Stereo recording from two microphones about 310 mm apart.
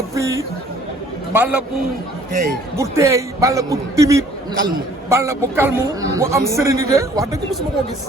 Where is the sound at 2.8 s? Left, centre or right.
Centre.